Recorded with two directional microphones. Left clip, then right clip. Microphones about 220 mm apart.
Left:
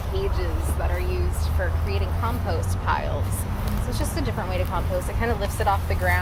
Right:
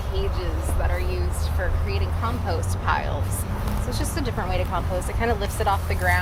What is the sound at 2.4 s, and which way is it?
Speech, 35° right (ahead or behind).